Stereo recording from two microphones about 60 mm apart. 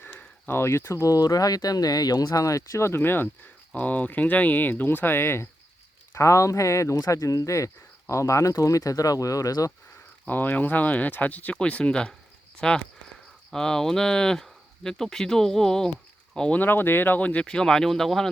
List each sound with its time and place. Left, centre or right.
0.0 s a sound: left
0.5 s speech: left
1.1 s speech: left
3.8 s speech: left
6.1 s speech: left
10.2 s speech: left
11.5 s speech: centre
16.6 s speech: left
17.4 s speech: centre